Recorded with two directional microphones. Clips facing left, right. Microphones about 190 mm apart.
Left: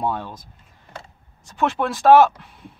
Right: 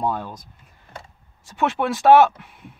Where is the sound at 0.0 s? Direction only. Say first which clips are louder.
Even; 5° right (ahead or behind).